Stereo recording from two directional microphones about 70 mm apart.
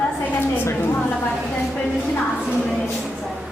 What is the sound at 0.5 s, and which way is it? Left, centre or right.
Speech, left.